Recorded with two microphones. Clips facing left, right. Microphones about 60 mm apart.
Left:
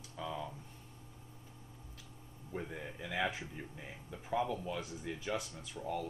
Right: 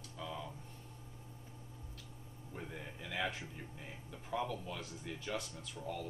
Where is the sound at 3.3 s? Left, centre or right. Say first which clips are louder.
Left 2 dB; centre.